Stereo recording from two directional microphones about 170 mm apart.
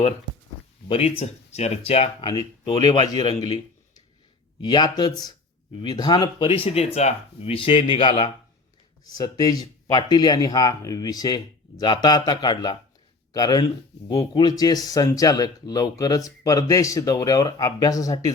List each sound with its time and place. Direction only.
0.9 s a man's voice: 35° left (ahead or behind)